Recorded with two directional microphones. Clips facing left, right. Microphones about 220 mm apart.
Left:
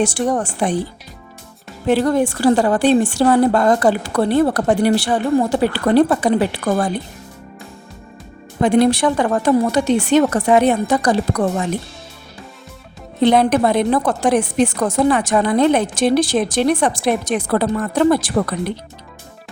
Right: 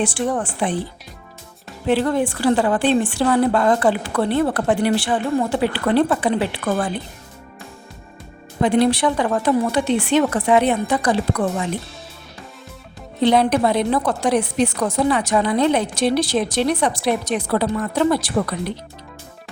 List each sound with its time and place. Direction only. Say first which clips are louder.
0.0 s a woman's voice: left 3 dB; 40° left (ahead or behind)
1.9 s a woman's voice: left 3 dB; 45° left (ahead or behind)
8.6 s a woman's voice: left 3 dB; 45° left (ahead or behind)
13.2 s a woman's voice: left 2 dB; 50° left (ahead or behind)